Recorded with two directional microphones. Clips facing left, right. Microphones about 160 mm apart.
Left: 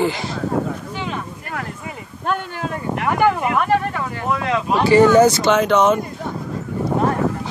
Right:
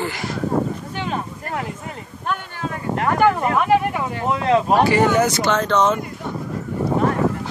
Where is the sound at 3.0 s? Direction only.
5° left (ahead or behind).